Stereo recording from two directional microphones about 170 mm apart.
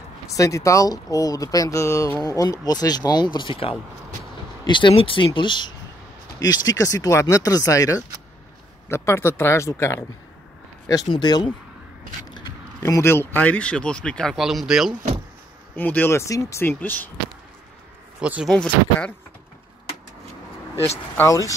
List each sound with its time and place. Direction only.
0.3 s speech: 20° left (ahead or behind); by 15.0 s centre (ahead or behind)
15.7 s speech: 10° left (ahead or behind)
18.2 s speech: 5° right (ahead or behind)